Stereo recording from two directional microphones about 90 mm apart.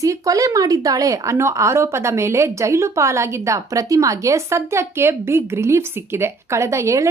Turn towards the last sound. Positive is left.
turn(degrees=-35)  # may be behind; listen again after turning